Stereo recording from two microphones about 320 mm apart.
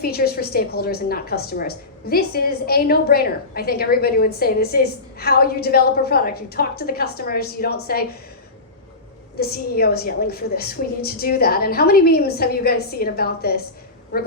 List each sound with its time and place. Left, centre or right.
0.0 s a woman's voice: left
9.4 s a woman's voice: left